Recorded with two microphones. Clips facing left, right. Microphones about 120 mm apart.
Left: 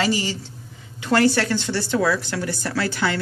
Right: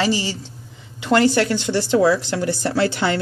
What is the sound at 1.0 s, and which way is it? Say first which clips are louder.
Speech: right 2 dB; 15° right (ahead or behind).